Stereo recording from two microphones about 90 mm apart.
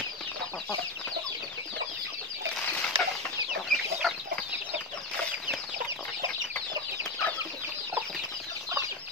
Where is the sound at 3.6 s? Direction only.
Centre (ahead or behind).